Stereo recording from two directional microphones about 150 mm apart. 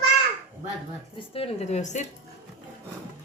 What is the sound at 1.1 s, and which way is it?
Speech, 40° left (ahead or behind).